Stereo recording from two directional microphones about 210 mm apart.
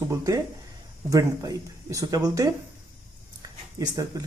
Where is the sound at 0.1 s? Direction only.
15° right (ahead or behind).